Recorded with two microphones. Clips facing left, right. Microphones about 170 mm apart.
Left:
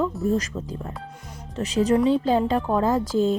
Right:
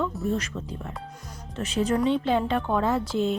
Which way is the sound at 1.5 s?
35° left (ahead or behind).